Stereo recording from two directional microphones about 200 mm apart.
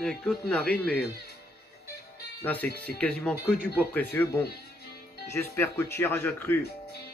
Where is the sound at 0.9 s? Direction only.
55° left (ahead or behind).